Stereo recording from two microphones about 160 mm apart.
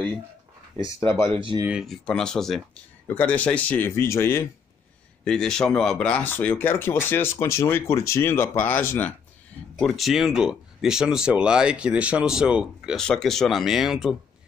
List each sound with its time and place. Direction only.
0.7 s speech: 20° left (ahead or behind)
1.3 s speech: 30° right (ahead or behind)
1.7 s speech: centre (ahead or behind); by 4.5 s 15° left (ahead or behind)
5.2 s speech: 5° left (ahead or behind)
9.8 s speech: centre (ahead or behind)